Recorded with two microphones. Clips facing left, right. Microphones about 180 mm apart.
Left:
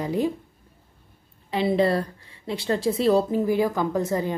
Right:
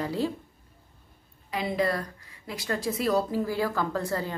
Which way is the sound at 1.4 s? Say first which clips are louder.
Left 6 dB; 30° left (ahead or behind).